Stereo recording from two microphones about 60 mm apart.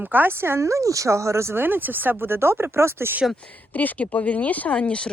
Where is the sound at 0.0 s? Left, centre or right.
Right.